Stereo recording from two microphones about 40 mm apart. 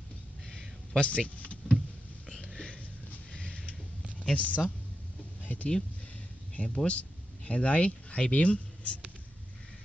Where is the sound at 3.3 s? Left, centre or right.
Left.